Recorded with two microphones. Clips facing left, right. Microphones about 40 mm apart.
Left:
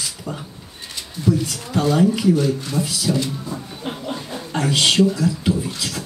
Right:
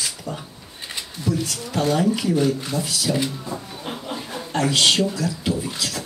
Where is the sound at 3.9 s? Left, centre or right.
Centre.